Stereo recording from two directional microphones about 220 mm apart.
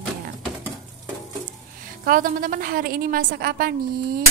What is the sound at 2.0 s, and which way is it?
Speech, 40° right (ahead or behind).